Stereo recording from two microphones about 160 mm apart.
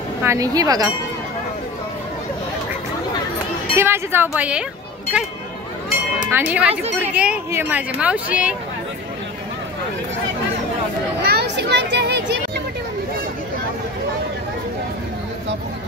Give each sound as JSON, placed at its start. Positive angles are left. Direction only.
{"t": 0.2, "sound": "speech", "side_deg": -20}
{"t": 3.7, "sound": "speech", "side_deg": -15}
{"t": 6.3, "sound": "speech", "side_deg": -10}
{"t": 11.2, "sound": "a child's voice", "side_deg": -90}